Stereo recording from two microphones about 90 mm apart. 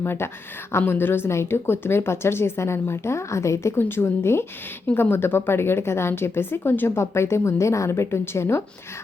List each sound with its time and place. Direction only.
0.0 s a woman's voice: 25° left (ahead or behind)